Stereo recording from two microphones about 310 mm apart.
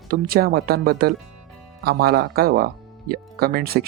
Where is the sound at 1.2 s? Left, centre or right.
Right.